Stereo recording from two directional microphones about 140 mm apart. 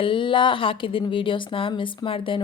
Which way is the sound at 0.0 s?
35° left (ahead or behind).